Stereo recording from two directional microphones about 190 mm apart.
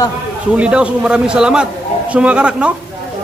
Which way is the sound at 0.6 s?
5° right (ahead or behind).